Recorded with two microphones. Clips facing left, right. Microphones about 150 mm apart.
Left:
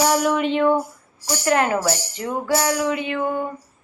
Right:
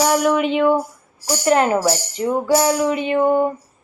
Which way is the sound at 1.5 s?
25° right (ahead or behind).